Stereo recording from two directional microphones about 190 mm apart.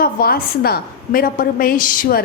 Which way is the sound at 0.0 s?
50° left (ahead or behind).